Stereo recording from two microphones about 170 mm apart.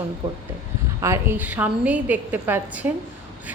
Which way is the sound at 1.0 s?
15° right (ahead or behind).